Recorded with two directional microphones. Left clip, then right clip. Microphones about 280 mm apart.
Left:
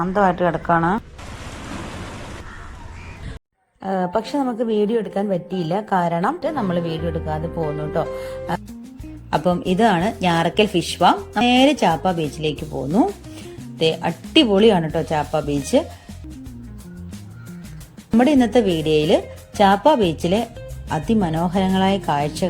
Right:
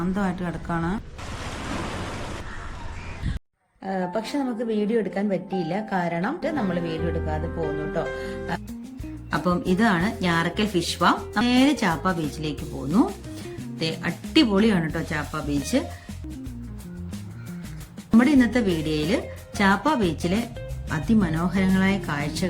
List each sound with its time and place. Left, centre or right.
0.0 s speech: left
1.5 s a sound: centre
3.8 s a woman's voice: left
9.3 s speech: centre
18.2 s speech: centre